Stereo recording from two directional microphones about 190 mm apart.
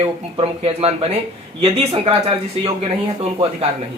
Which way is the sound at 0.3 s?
30° right (ahead or behind).